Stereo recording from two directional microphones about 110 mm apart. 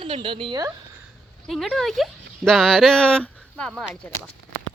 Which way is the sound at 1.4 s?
5° left (ahead or behind).